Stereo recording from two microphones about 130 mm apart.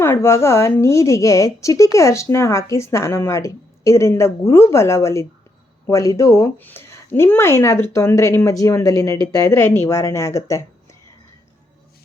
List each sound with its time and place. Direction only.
0.0 s a woman's voice: 20° left (ahead or behind)